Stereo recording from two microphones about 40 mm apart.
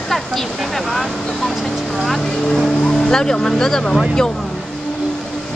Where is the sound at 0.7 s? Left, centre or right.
Centre.